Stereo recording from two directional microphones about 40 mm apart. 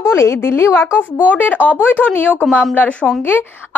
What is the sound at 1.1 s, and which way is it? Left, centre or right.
Speech, left.